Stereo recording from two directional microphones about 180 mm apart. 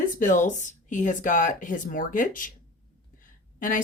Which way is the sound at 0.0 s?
45° left (ahead or behind).